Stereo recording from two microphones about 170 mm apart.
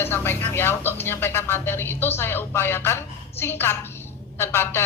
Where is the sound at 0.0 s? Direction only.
15° left (ahead or behind).